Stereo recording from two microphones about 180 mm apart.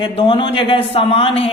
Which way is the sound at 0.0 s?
30° left (ahead or behind).